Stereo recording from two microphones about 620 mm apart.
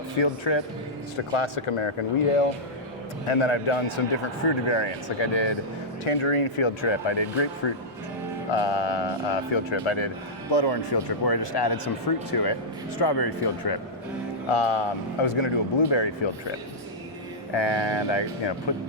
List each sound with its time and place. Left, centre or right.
0.5 s speech: left
4.4 s speech: left
14.5 s speech: left
17.5 s speech: left